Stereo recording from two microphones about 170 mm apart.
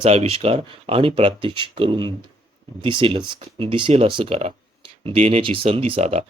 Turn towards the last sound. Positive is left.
turn(degrees=-40)  # may be behind; listen again after turning